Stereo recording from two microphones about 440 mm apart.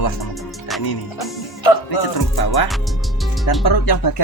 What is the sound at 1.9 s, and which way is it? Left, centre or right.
Speech, left.